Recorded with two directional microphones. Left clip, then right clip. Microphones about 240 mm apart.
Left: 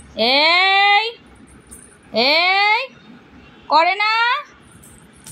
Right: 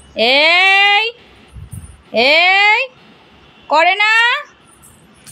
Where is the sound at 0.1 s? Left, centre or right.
Centre.